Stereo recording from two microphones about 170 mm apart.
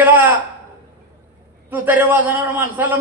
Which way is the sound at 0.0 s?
10° right (ahead or behind).